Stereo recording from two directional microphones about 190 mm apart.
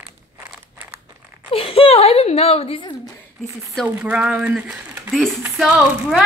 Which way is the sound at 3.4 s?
Centre (ahead or behind).